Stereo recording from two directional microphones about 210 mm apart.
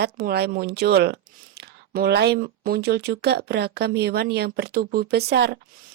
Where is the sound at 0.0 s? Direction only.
50° right (ahead or behind).